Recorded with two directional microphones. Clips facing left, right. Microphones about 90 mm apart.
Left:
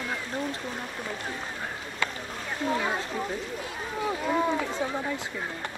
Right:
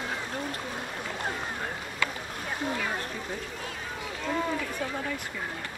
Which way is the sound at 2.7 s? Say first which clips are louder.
Left 4 dB; 20° left (ahead or behind).